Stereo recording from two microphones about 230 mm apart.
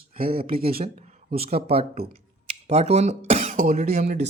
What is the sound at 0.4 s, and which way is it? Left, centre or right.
Speech, right.